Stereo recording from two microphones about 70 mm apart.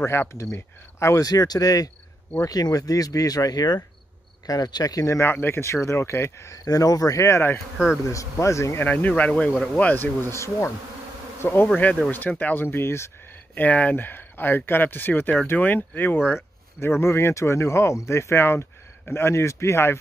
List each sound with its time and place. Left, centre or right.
0.0 s speech: left
1.2 s speech: left
5.3 s speech: left
6.6 s speech: left
7.7 s speech: centre
8.1 s speech: left
8.7 s speech: left
10.3 s speech: left
11.4 s speech: left
12.6 s speech: left
13.6 s speech: left
17.0 s speech: left